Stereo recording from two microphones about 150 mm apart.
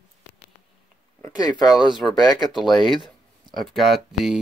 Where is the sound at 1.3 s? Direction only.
25° left (ahead or behind).